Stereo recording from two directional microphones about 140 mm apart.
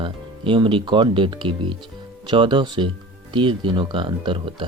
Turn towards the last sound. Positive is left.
turn(degrees=-35)  # may be behind; listen again after turning